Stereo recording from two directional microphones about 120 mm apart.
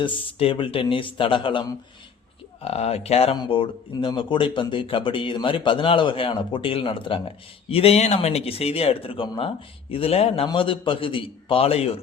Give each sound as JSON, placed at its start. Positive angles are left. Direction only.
{"t": 0.0, "sound": "speech", "side_deg": 45}
{"t": 2.6, "sound": "speech", "side_deg": 60}
{"t": 3.3, "sound": "speech", "side_deg": 40}
{"t": 9.9, "sound": "speech", "side_deg": 55}